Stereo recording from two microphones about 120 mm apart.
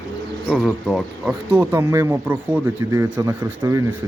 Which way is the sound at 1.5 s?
20° right (ahead or behind).